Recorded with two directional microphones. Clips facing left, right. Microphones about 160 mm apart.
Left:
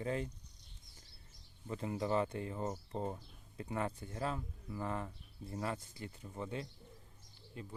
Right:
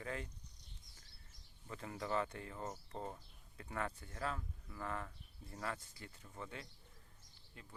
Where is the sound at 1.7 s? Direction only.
20° left (ahead or behind).